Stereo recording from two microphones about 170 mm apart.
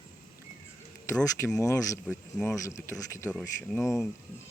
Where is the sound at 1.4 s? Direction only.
15° left (ahead or behind).